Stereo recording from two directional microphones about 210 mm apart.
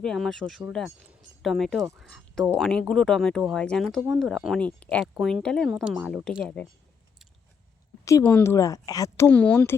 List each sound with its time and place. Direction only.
0.0 s speech: centre (ahead or behind)
8.0 s speech: 10° left (ahead or behind)